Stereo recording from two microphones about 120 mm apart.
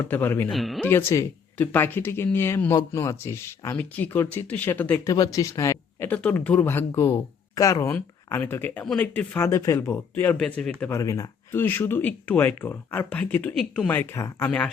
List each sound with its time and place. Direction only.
0.1 s speech: 15° left (ahead or behind)
0.5 s speech: centre (ahead or behind)
0.9 s speech: 20° left (ahead or behind)
3.8 s speech: 15° left (ahead or behind)
5.0 s speech: 30° left (ahead or behind)
6.1 s speech: 15° left (ahead or behind)
7.9 s speech: 15° left (ahead or behind)
9.5 s speech: 25° left (ahead or behind); by 10.8 s 10° left (ahead or behind)
10.8 s speech: 25° left (ahead or behind)
11.5 s speech: 15° left (ahead or behind)
13.9 s speech: 20° left (ahead or behind)